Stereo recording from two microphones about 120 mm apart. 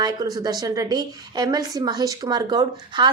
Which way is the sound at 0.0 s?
35° right (ahead or behind).